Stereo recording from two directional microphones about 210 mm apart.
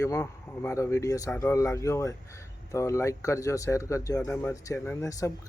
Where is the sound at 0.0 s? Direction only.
10° left (ahead or behind).